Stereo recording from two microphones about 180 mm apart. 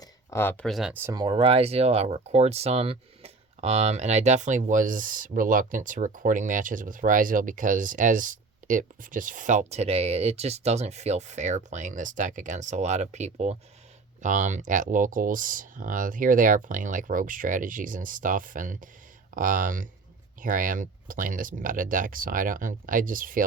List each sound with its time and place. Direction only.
0.0 s speech: 15° left (ahead or behind)
0.9 s speech: 20° right (ahead or behind); by 23.4 s 50° right (ahead or behind)